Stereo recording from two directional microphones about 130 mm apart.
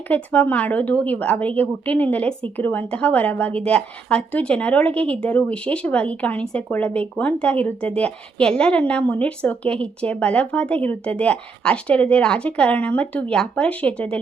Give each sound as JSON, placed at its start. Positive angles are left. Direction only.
{"t": 0.1, "sound": "a woman's voice", "side_deg": 15}